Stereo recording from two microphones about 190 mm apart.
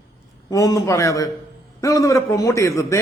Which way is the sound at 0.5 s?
20° left (ahead or behind).